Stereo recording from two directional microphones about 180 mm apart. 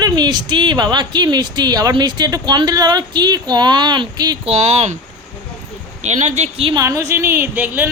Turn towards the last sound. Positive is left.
turn(degrees=-10)  # may be behind; listen again after turning